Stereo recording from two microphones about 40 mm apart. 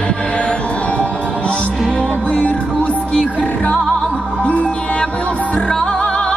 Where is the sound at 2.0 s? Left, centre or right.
Left.